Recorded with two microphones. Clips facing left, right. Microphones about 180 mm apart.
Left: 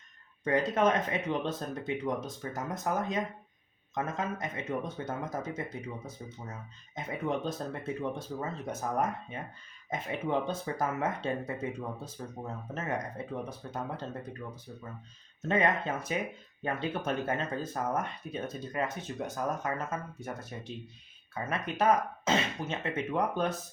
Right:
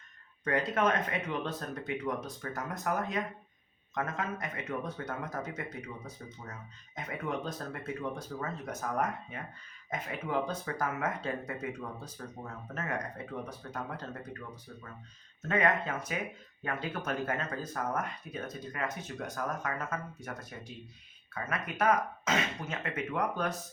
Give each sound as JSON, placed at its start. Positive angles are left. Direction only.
{"t": 0.4, "sound": "speech", "side_deg": 20}
{"t": 15.4, "sound": "speech", "side_deg": 25}